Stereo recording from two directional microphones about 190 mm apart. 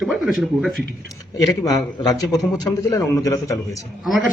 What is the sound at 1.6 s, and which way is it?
A man's voice, 20° left (ahead or behind).